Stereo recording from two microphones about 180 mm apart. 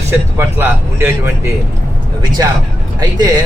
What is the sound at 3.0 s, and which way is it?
Speech, 20° right (ahead or behind).